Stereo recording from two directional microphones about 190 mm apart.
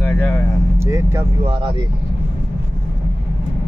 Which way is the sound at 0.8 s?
15° right (ahead or behind).